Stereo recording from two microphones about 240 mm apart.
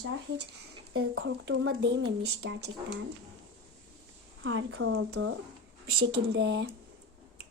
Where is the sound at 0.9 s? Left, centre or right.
Right.